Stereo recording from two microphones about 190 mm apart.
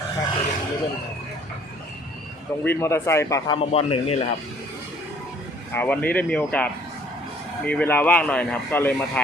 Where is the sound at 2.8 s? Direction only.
15° left (ahead or behind).